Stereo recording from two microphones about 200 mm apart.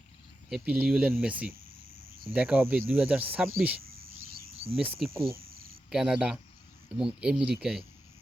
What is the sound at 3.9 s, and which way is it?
Cricket, 50° right (ahead or behind).